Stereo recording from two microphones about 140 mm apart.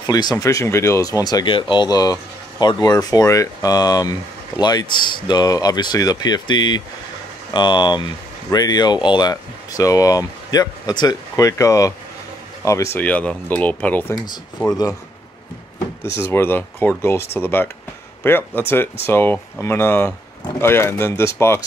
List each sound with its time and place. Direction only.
0.0 s speech: 30° left (ahead or behind); by 14.1 s 10° left (ahead or behind)
16.0 s speech: 20° left (ahead or behind)